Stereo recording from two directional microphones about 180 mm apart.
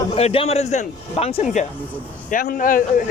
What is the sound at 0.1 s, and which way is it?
A man's voice, 35° left (ahead or behind).